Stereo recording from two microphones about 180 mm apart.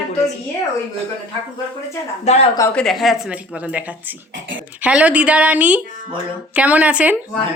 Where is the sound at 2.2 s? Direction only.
40° left (ahead or behind).